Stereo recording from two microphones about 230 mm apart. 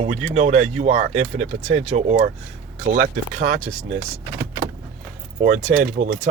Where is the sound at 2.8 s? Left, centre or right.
Right.